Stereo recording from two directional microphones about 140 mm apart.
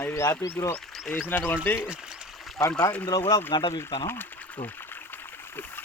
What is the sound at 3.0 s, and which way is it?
Speech, 25° left (ahead or behind).